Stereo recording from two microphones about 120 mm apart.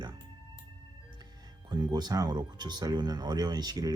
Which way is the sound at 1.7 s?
35° right (ahead or behind).